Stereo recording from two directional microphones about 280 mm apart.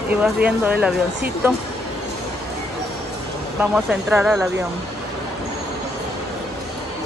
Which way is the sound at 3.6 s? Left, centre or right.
Centre.